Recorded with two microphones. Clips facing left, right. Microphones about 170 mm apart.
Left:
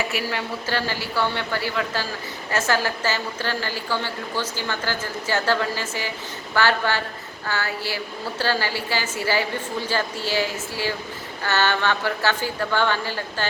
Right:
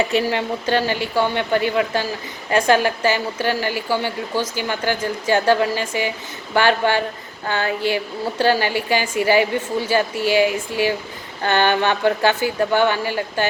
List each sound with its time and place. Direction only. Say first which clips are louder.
0.2 s a woman's voice: right 7 dB; 20° right (ahead or behind)